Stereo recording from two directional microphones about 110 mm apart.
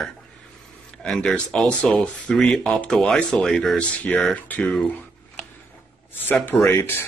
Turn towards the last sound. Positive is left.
turn(degrees=20)  # may be behind; listen again after turning